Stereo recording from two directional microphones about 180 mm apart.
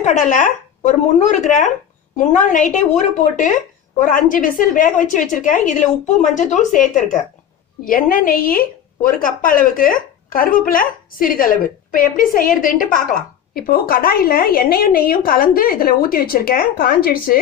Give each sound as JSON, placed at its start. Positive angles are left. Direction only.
{"t": 0.0, "sound": "a woman's voice", "side_deg": 45}